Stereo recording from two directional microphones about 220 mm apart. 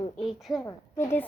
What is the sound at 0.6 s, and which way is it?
Speech, 10° left (ahead or behind).